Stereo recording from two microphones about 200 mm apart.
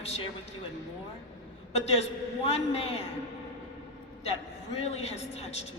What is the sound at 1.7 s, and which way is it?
A woman's voice, 30° left (ahead or behind).